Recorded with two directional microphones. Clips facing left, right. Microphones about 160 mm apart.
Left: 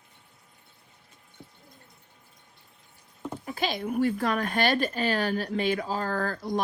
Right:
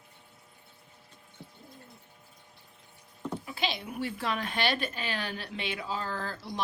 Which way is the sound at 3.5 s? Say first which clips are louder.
Left 8 dB; 45° left (ahead or behind).